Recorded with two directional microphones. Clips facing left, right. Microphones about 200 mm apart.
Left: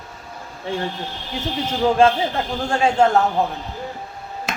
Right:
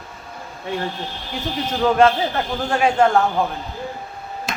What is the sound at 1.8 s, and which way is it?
Speech, 25° left (ahead or behind).